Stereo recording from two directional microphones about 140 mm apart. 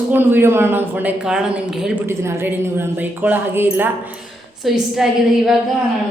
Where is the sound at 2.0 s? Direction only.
20° right (ahead or behind); by 5.0 s 5° right (ahead or behind).